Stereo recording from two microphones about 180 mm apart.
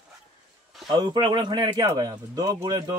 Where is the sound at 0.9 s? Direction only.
25° right (ahead or behind).